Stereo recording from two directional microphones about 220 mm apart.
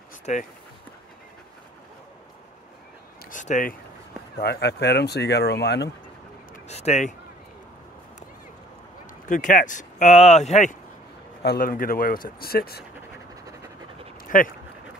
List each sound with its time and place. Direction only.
0.2 s speech: 35° left (ahead or behind)
3.3 s speech: 35° left (ahead or behind)
4.4 s speech: 45° left (ahead or behind)
6.5 s a sound: 30° left (ahead or behind)
9.3 s speech: 35° left (ahead or behind)
14.3 s speech: 35° left (ahead or behind)